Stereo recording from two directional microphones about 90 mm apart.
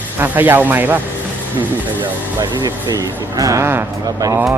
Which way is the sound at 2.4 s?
45° right (ahead or behind).